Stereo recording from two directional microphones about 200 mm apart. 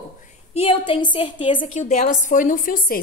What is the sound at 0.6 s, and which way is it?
A woman's voice, 25° left (ahead or behind).